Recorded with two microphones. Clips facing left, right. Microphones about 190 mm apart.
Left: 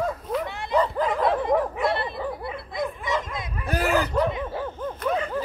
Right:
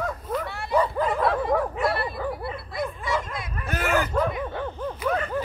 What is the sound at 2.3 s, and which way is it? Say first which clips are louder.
Bow-wow: right 1 dB; 20° left (ahead or behind).